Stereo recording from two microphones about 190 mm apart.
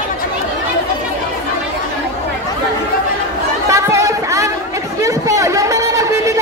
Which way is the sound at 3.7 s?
15° right (ahead or behind).